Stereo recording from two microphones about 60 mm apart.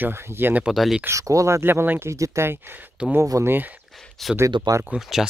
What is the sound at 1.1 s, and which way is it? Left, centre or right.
Speech, right.